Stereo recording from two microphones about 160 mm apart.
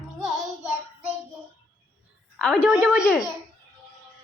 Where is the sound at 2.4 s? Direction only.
5° left (ahead or behind).